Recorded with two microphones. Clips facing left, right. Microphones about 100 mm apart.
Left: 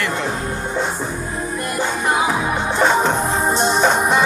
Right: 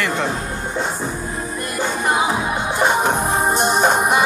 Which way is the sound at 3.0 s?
15° right (ahead or behind).